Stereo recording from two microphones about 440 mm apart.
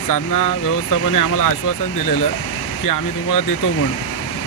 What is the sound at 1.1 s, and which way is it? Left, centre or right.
Speech, left.